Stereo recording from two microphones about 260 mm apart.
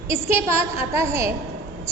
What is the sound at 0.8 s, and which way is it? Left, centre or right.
Speech, centre.